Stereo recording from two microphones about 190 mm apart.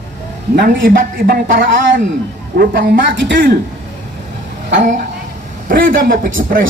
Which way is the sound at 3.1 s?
70° right (ahead or behind).